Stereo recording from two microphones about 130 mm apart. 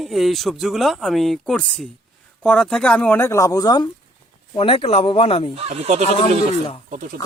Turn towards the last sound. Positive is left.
turn(degrees=-90)